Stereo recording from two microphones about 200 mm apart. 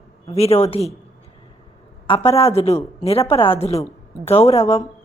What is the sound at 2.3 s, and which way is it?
A woman's voice, 30° left (ahead or behind).